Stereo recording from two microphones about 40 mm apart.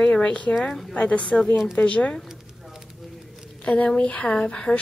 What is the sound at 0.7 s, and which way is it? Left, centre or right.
Speech, centre.